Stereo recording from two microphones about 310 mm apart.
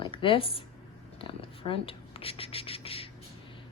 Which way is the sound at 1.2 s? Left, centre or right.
Centre.